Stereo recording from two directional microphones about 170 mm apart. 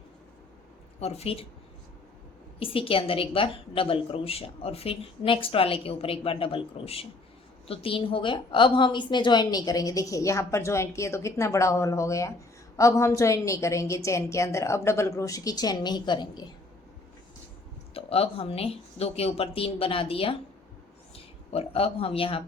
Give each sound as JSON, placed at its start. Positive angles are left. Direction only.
{"t": 0.9, "sound": "a woman's voice", "side_deg": 40}
{"t": 2.6, "sound": "a woman's voice", "side_deg": 30}
{"t": 17.9, "sound": "a woman's voice", "side_deg": 35}
{"t": 21.5, "sound": "a woman's voice", "side_deg": 35}